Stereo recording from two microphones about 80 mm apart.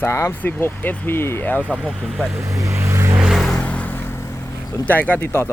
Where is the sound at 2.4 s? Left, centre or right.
Right.